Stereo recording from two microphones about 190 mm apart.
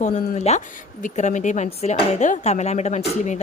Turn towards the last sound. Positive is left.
turn(degrees=40)  # may be behind; listen again after turning